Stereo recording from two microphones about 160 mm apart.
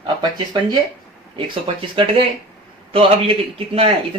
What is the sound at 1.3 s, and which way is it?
A man's voice, 35° right (ahead or behind).